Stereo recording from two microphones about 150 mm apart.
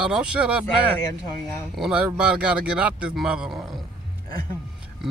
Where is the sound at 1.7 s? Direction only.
5° right (ahead or behind).